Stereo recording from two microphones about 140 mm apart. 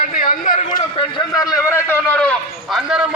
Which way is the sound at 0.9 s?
30° left (ahead or behind).